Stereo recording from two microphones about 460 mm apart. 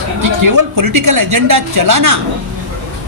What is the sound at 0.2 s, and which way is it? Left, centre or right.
Speech, right.